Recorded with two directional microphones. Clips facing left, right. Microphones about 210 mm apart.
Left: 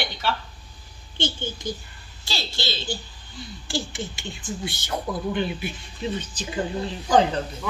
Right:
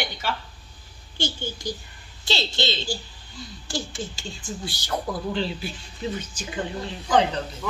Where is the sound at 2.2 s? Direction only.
20° right (ahead or behind).